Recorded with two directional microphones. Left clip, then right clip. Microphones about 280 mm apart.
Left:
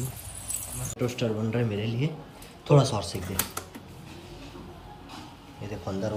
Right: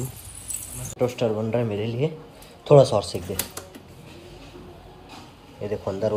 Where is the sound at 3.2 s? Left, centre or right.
Centre.